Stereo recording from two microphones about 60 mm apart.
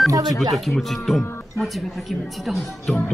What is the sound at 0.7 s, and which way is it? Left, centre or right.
Speech, centre.